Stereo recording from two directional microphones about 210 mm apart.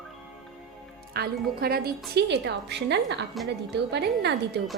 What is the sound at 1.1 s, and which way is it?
A woman's voice, 45° right (ahead or behind).